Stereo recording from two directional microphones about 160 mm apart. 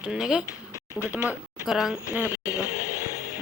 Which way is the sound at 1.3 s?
Centre (ahead or behind).